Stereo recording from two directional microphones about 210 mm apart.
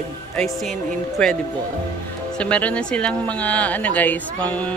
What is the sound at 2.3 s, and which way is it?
Speech, 5° left (ahead or behind).